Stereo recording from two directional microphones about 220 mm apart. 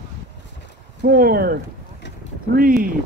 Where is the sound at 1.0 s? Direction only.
45° right (ahead or behind).